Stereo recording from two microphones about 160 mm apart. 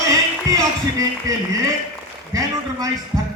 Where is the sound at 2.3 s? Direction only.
20° right (ahead or behind).